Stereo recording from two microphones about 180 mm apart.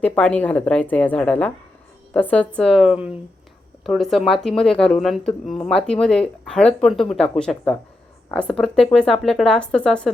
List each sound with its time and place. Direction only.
0.0 s a woman's voice: 10° left (ahead or behind)